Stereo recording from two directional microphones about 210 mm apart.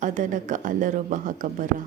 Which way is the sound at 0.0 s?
35° right (ahead or behind).